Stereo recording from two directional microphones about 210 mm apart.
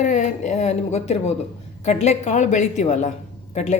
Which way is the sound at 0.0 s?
35° left (ahead or behind).